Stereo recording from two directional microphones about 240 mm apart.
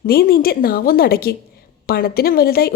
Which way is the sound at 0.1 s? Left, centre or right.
Left.